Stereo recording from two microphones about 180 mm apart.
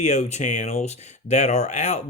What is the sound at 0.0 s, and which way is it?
Speech, 40° left (ahead or behind).